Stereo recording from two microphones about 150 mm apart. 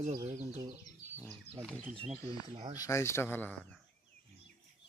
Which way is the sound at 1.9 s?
40° right (ahead or behind).